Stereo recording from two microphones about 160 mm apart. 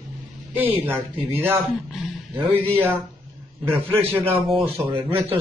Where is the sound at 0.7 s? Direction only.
15° right (ahead or behind).